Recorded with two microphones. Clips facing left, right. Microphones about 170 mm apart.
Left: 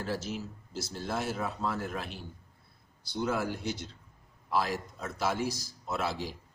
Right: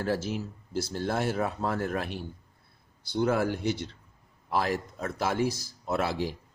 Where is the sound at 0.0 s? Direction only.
55° right (ahead or behind).